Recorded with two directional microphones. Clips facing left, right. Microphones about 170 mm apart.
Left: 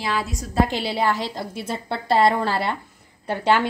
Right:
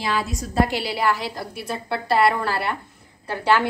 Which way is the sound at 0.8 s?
25° left (ahead or behind).